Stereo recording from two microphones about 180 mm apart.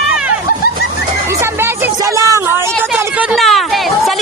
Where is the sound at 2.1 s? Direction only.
15° right (ahead or behind).